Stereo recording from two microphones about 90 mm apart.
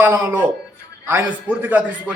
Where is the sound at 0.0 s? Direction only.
20° right (ahead or behind).